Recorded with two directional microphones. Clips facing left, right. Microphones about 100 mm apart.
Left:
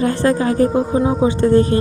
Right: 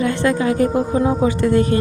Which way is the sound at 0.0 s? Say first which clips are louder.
Left 2 dB; 35° left (ahead or behind).